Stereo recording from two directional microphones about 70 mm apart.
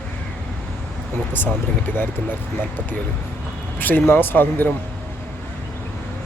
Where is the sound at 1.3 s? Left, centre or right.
Left.